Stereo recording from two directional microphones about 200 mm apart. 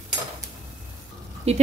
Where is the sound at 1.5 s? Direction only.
30° right (ahead or behind).